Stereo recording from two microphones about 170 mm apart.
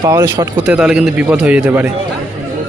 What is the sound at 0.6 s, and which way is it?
A man's voice, 5° right (ahead or behind).